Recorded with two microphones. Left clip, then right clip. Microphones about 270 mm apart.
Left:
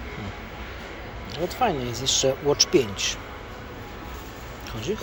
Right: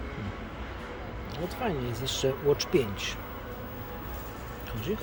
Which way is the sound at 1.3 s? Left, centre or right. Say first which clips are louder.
Left 9 dB; centre.